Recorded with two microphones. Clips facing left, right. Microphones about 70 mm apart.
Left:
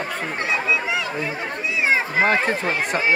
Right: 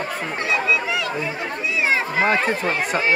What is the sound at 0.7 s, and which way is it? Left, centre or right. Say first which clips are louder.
Speech: right 1 dB; left.